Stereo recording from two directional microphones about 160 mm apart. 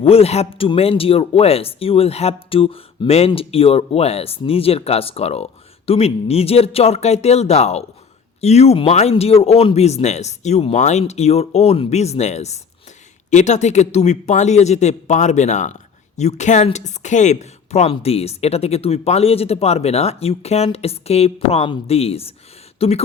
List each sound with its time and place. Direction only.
0.0 s speech: 40° left (ahead or behind)